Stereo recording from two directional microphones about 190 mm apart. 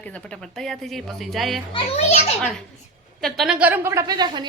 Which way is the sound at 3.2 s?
Centre (ahead or behind).